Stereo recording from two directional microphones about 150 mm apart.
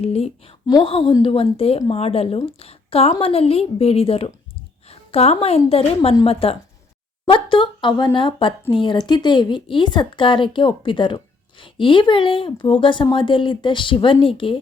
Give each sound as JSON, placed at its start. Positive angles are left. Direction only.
{"t": 0.0, "sound": "speech", "side_deg": 40}